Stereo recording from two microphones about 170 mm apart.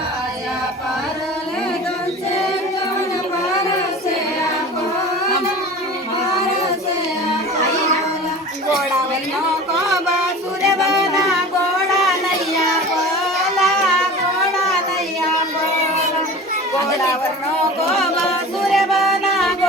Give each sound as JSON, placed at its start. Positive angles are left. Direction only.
{"t": 10.7, "sound": "a sound", "side_deg": 20}
{"t": 13.4, "sound": "music", "side_deg": 0}
{"t": 16.7, "sound": "chatter", "side_deg": 20}
{"t": 17.8, "sound": "music", "side_deg": 0}